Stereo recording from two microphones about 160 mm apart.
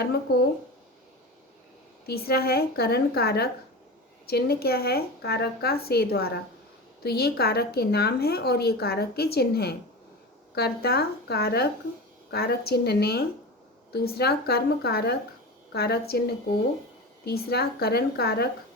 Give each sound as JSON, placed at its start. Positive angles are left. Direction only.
{"t": 2.0, "sound": "a woman's voice", "side_deg": 80}
{"t": 17.2, "sound": "a woman's voice", "side_deg": 80}